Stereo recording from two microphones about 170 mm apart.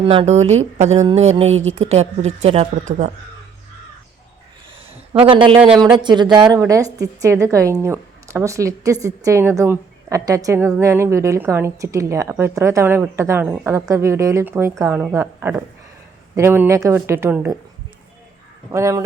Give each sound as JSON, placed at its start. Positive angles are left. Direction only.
{"t": 0.0, "sound": "speech", "side_deg": -30}
{"t": 5.2, "sound": "a woman's voice", "side_deg": -30}
{"t": 18.7, "sound": "speech", "side_deg": -20}